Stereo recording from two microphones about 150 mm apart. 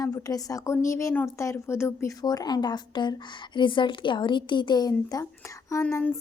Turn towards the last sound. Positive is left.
turn(degrees=20)  # may be behind; listen again after turning